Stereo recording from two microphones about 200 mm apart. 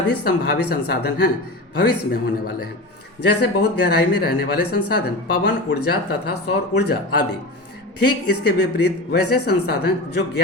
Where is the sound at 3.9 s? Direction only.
50° left (ahead or behind).